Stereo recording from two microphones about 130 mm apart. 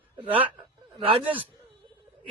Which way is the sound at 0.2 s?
45° right (ahead or behind).